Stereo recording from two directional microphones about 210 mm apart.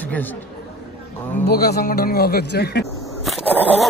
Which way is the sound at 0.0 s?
5° left (ahead or behind).